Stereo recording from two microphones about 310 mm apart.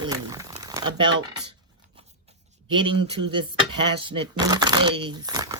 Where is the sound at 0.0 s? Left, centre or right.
Centre.